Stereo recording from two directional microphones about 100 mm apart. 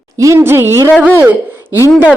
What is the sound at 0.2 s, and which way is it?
Speech, 30° right (ahead or behind).